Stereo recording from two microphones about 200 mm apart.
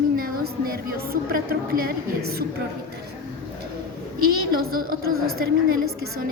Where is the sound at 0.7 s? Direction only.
50° right (ahead or behind).